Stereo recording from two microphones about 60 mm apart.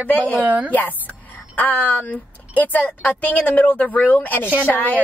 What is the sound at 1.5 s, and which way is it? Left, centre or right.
A woman's voice, left.